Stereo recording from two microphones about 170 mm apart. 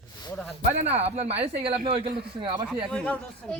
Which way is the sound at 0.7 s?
40° right (ahead or behind).